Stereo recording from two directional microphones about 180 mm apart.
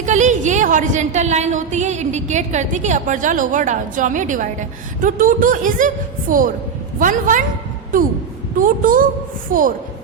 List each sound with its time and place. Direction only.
0.0 s a woman's voice: 40° right (ahead or behind)
8.5 s a woman's voice: 50° right (ahead or behind)